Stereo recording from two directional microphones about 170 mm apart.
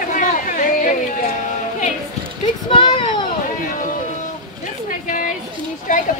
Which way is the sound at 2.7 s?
30° left (ahead or behind).